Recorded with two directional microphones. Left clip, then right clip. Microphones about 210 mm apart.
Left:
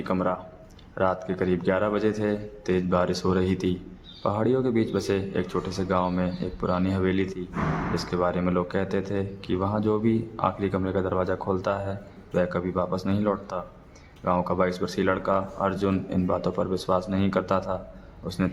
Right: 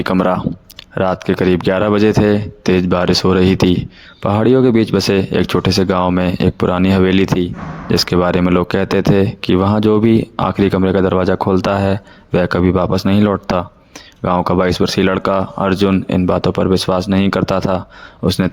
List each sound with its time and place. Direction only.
0.0 s speech: 45° right (ahead or behind)